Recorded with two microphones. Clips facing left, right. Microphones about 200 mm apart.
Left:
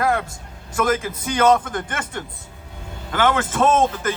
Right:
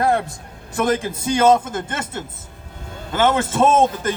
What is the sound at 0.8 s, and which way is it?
Speech, 30° right (ahead or behind).